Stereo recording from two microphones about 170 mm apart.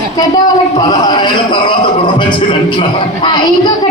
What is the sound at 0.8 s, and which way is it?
Music, 25° left (ahead or behind).